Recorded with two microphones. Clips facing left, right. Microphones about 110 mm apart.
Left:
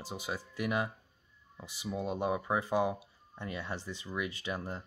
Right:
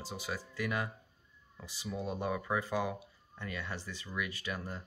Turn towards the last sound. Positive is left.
turn(degrees=25)  # may be behind; listen again after turning